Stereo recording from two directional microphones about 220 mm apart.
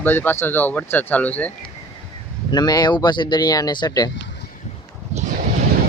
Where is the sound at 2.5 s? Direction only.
20° left (ahead or behind).